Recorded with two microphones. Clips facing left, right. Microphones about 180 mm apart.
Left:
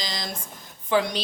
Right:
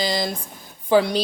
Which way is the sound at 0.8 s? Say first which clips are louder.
Right 6 dB; 35° right (ahead or behind).